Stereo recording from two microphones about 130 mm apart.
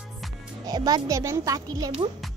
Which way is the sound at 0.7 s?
30° right (ahead or behind).